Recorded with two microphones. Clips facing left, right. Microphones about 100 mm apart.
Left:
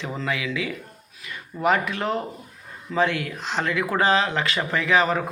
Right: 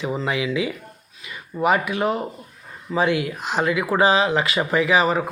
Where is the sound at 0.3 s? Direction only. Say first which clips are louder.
Right 3 dB; 20° right (ahead or behind).